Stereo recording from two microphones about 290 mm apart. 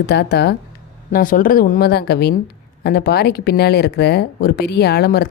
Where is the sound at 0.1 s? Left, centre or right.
Left.